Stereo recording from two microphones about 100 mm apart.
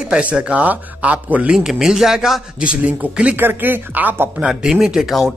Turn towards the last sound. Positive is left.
turn(degrees=0)  # may be behind; listen again after turning